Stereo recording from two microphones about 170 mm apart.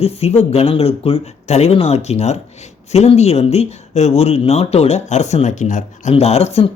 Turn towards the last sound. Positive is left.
turn(degrees=35)  # may be behind; listen again after turning